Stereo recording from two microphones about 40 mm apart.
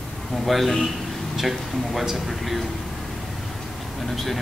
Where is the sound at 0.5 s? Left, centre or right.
Centre.